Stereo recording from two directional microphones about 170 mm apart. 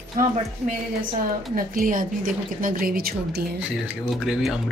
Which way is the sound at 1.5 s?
55° right (ahead or behind).